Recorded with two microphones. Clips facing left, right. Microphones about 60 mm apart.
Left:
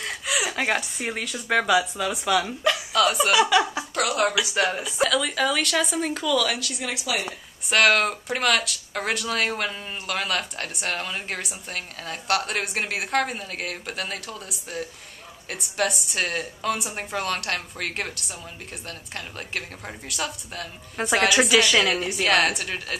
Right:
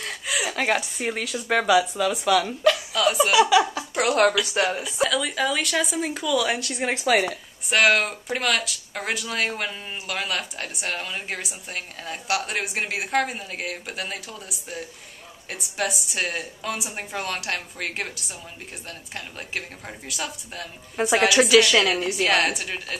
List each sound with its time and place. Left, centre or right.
0.0 s a woman's voice: centre
6.4 s speech: right
7.6 s speech: centre